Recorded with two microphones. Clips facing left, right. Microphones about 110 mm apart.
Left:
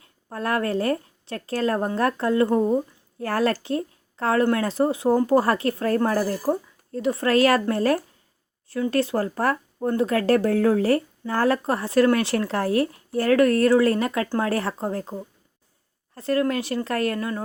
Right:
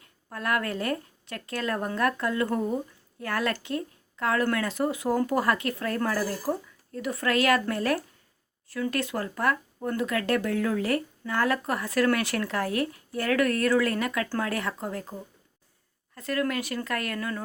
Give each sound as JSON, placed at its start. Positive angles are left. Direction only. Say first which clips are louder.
{"t": 0.0, "sound": "a woman's voice", "louder": "left 4 dB", "side_deg": 30}